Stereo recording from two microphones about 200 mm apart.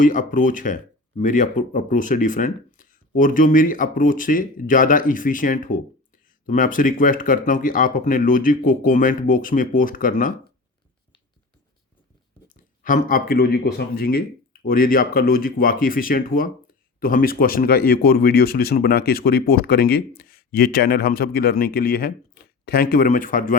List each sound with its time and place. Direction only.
0.0 s speech: 40° left (ahead or behind)
12.8 s speech: 45° left (ahead or behind)